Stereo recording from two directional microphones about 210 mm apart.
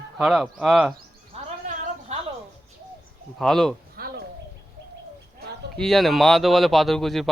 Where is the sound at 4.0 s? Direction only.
45° right (ahead or behind).